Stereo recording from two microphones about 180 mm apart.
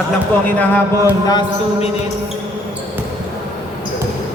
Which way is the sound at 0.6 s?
20° left (ahead or behind).